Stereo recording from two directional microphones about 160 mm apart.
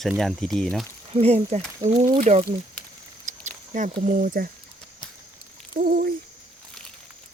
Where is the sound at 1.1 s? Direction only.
40° right (ahead or behind); by 4.5 s 60° right (ahead or behind).